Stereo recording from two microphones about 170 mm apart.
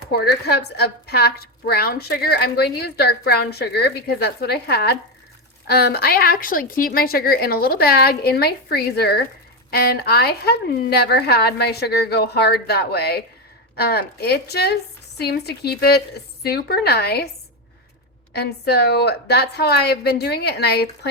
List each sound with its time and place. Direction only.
0.1 s a woman's voice: 70° left (ahead or behind)
18.3 s a woman's voice: 70° left (ahead or behind)